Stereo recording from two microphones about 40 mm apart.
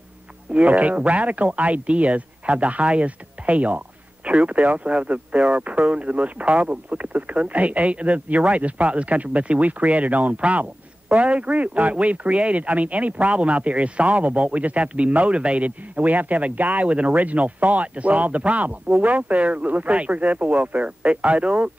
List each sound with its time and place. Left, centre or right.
0.5 s speech: right